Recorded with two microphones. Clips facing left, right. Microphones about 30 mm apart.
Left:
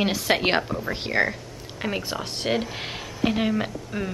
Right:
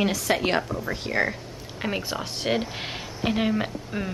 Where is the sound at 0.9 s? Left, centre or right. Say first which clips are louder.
Left 1 dB; left.